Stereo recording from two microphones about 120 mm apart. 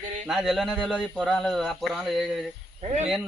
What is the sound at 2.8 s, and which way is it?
Speech, 60° right (ahead or behind).